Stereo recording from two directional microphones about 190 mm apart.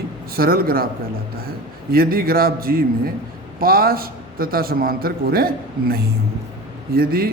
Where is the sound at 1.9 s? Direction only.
50° right (ahead or behind).